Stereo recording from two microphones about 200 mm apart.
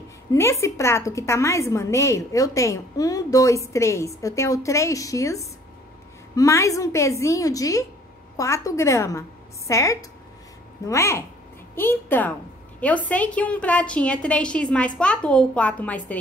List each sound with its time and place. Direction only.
0.3 s a woman's voice: 15° left (ahead or behind)